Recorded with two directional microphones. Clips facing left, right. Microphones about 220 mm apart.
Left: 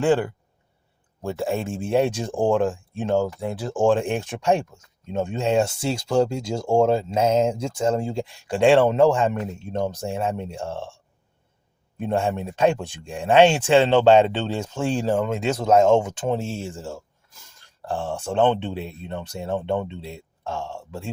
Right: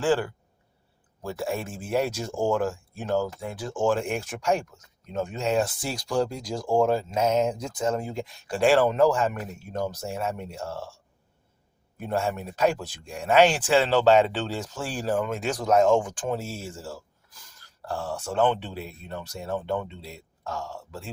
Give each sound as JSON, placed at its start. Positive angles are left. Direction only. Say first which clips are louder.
{"t": 0.0, "sound": "speech", "louder": "left 4 dB", "side_deg": 20}
{"t": 11.9, "sound": "speech", "louder": "left 4 dB", "side_deg": 25}